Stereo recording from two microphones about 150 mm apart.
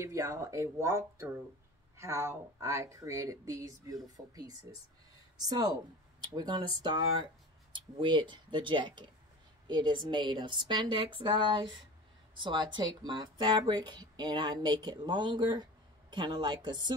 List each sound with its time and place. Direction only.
0.0 s speech: 20° right (ahead or behind)